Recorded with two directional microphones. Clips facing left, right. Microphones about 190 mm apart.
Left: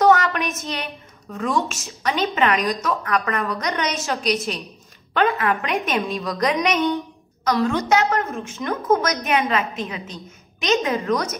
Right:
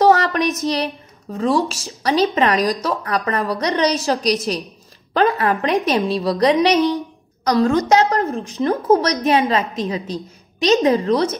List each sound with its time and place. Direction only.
0.0 s a woman's voice: 35° right (ahead or behind)